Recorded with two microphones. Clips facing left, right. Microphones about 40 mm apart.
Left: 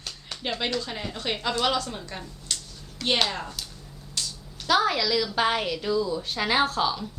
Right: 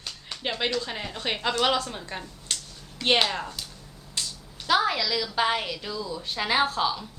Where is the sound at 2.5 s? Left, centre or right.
Right.